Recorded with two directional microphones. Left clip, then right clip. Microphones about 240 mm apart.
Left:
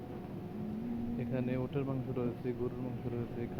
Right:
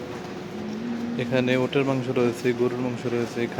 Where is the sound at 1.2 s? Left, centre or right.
Right.